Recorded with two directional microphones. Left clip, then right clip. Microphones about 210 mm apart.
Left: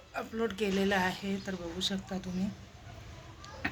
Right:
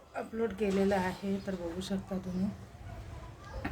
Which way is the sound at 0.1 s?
Centre (ahead or behind).